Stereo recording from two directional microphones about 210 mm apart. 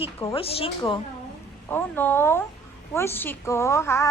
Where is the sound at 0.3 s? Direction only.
25° left (ahead or behind).